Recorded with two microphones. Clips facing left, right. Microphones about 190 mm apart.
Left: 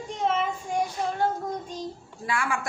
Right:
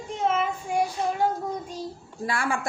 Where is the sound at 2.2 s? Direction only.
35° right (ahead or behind).